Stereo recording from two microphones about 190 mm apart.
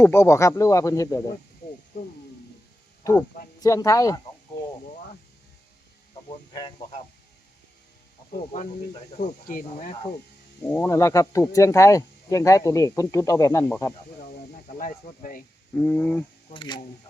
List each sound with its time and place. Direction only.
0.0 s speech: 15° left (ahead or behind)
3.0 s speech: 15° left (ahead or behind)
6.5 s speech: 25° left (ahead or behind)
9.5 s speech: 45° left (ahead or behind)
10.6 s speech: 10° left (ahead or behind)
14.8 s speech: 45° left (ahead or behind)
15.7 s speech: 10° left (ahead or behind)
16.5 s speech: 25° left (ahead or behind)